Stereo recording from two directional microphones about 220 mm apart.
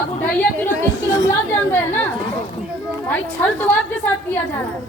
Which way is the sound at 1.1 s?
15° left (ahead or behind).